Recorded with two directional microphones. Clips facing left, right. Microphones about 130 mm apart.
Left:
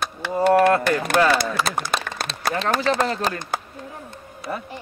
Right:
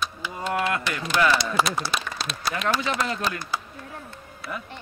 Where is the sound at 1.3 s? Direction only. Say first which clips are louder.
Left 2 dB; 50° left (ahead or behind).